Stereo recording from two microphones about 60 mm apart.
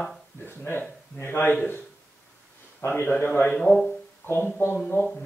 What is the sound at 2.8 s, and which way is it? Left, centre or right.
Speech, left.